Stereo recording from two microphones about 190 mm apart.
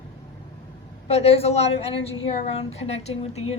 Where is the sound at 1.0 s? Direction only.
35° left (ahead or behind).